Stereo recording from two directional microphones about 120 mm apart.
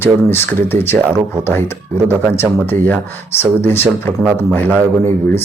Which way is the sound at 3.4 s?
20° left (ahead or behind).